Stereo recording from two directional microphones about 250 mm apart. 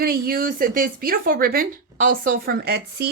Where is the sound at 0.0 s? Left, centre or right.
Right.